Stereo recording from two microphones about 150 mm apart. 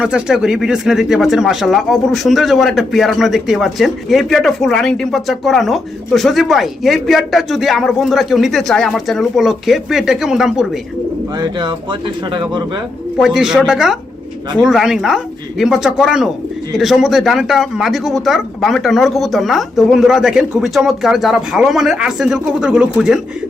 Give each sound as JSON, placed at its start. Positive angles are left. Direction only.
{"t": 0.0, "sound": "speech", "side_deg": -5}
{"t": 11.3, "sound": "speech", "side_deg": -30}
{"t": 13.1, "sound": "speech", "side_deg": 0}